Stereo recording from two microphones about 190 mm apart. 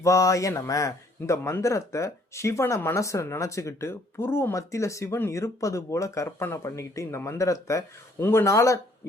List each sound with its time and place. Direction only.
0.0 s speech: 15° left (ahead or behind)